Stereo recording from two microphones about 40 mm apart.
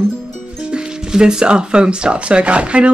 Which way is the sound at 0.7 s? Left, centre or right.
Right.